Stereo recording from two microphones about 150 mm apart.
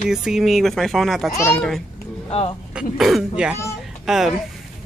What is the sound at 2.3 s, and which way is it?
Speech, 40° left (ahead or behind).